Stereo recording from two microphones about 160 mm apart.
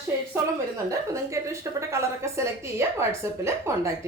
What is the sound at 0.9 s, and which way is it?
A woman's voice, 20° right (ahead or behind).